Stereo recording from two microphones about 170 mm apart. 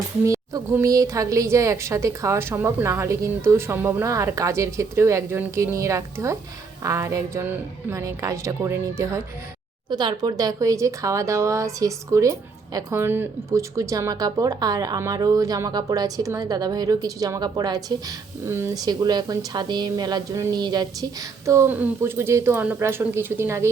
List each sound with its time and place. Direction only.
0.3 s a woman's voice: 15° right (ahead or behind)